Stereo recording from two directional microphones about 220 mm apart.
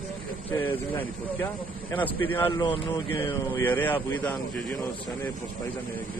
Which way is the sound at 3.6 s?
10° left (ahead or behind).